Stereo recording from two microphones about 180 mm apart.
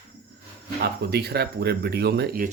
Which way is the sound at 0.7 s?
65° right (ahead or behind).